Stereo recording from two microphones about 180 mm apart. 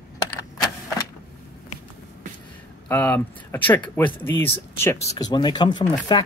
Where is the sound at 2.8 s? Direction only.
10° left (ahead or behind).